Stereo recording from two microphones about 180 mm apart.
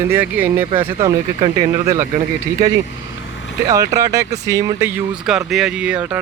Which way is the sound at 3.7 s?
20° right (ahead or behind).